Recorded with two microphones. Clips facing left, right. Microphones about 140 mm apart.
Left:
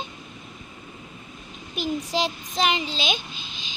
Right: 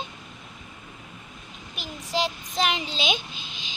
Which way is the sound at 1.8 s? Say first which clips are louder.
Left 3 dB; centre (ahead or behind).